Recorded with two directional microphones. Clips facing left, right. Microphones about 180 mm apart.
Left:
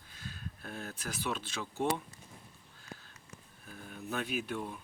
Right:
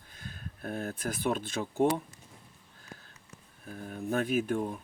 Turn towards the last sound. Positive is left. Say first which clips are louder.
# right 7 dB
turn(degrees=-40)  # may be behind; listen again after turning